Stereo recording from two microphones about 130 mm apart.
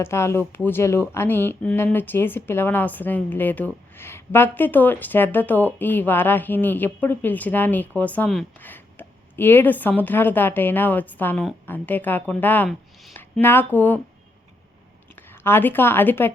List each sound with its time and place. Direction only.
0.0 s a woman's voice: 20° left (ahead or behind)
15.3 s a woman's voice: 15° left (ahead or behind)